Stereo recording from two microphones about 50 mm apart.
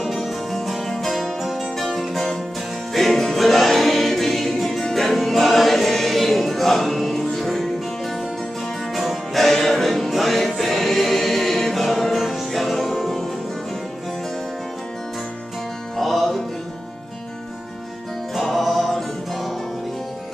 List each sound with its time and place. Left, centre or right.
0.0 s music: centre
8.9 s music: centre
16.0 s music: centre
18.3 s music: centre